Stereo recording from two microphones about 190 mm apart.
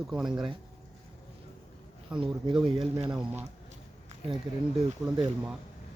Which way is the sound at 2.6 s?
25° right (ahead or behind).